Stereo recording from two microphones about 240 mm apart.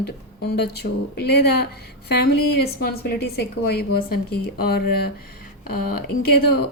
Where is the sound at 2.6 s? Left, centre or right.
Left.